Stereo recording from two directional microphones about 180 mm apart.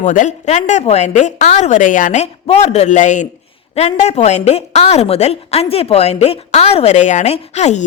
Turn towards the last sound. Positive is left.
turn(degrees=40)  # may be behind; listen again after turning